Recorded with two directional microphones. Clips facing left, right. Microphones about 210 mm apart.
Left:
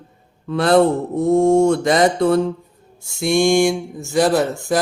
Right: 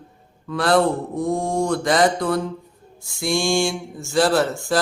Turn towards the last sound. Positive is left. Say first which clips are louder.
# left 2 dB
turn(degrees=15)  # may be behind; listen again after turning